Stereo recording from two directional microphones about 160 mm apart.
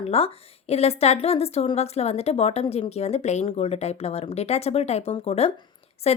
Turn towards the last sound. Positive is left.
turn(degrees=40)  # may be behind; listen again after turning